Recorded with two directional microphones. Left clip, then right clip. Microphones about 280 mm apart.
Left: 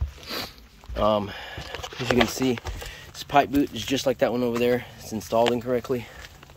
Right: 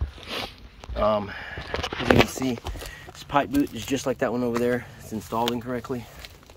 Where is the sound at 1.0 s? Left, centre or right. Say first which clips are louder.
Even; left.